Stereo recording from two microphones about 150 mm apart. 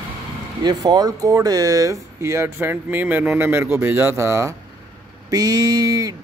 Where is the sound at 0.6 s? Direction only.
25° right (ahead or behind).